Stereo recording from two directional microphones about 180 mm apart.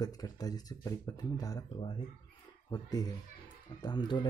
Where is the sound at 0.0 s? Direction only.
20° left (ahead or behind).